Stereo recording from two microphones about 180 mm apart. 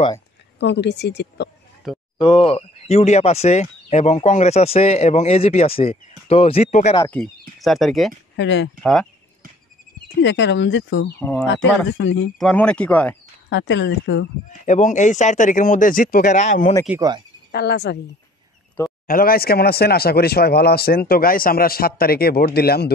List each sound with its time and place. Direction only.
0.6 s speech: 70° left (ahead or behind)
2.1 s speech: 25° left (ahead or behind)
7.1 s speech: 5° left (ahead or behind)
8.4 s speech: 85° left
10.2 s speech: 90° left
11.1 s speech: 10° left (ahead or behind)
11.4 s speech: 80° left
12.4 s speech: 5° left (ahead or behind)
13.5 s speech: 80° left
14.7 s speech: 45° left (ahead or behind)
17.5 s speech: 65° left (ahead or behind)
19.0 s speech: 55° left (ahead or behind)